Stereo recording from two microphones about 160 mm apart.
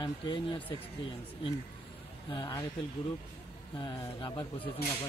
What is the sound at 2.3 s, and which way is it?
Speech, 25° left (ahead or behind).